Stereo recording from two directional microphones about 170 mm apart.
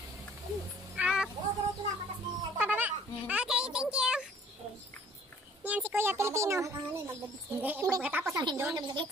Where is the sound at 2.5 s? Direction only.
10° right (ahead or behind).